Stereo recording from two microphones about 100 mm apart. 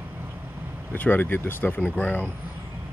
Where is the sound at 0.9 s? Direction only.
20° left (ahead or behind).